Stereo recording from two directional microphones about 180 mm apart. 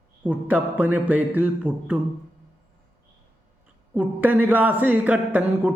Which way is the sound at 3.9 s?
10° right (ahead or behind).